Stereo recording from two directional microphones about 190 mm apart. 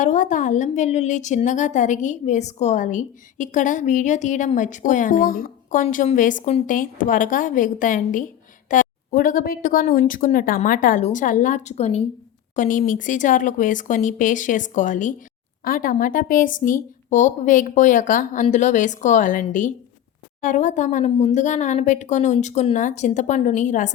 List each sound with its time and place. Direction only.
0.0 s a woman's voice: 40° left (ahead or behind)